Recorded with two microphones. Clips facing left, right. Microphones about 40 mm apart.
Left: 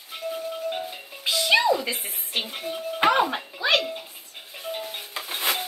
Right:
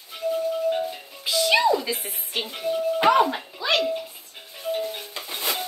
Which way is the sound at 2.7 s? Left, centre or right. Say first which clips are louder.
Right 3 dB; centre.